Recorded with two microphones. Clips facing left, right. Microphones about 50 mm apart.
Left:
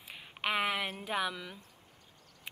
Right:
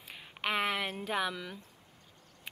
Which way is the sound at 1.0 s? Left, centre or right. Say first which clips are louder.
Right 1 dB; centre.